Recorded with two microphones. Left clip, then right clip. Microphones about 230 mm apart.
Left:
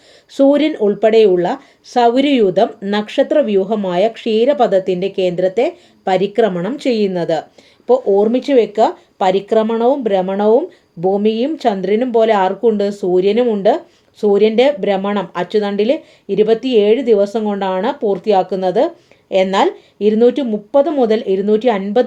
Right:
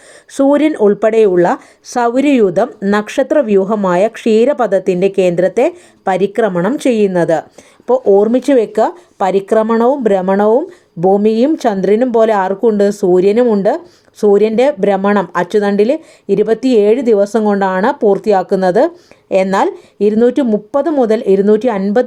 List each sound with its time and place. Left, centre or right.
0.3 s speech: right